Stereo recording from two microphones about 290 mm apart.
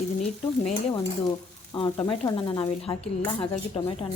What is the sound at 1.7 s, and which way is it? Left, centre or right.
Speech, centre.